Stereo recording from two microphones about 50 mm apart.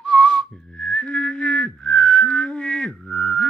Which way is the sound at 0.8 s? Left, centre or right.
Centre.